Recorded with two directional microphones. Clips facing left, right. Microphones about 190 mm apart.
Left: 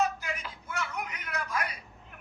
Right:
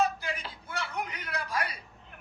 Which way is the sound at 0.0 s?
30° right (ahead or behind).